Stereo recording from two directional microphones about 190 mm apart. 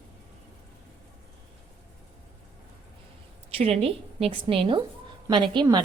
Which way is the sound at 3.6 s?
30° right (ahead or behind).